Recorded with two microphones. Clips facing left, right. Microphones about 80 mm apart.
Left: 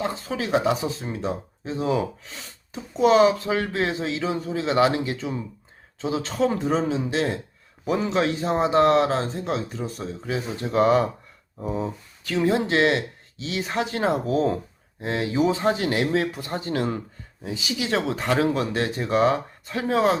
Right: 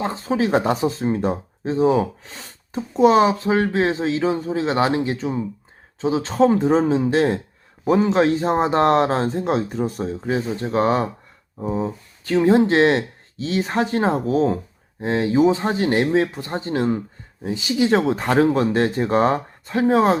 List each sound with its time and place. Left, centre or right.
0.0 s speech: right
0.5 s speech: right
3.0 s speech: right
6.6 s speech: right
15.0 s speech: right